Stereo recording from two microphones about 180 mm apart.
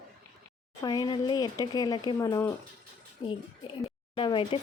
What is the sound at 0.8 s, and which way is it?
Speech, 20° left (ahead or behind).